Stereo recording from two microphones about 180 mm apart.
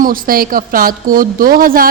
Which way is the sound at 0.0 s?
50° right (ahead or behind).